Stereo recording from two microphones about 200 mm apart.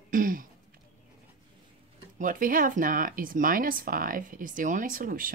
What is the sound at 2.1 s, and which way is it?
Speech, 40° right (ahead or behind).